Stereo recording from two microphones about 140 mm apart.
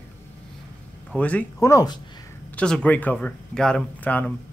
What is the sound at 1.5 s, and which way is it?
Speech, 20° left (ahead or behind).